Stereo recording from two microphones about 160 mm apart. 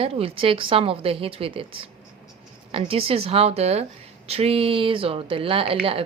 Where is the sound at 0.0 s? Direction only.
35° right (ahead or behind).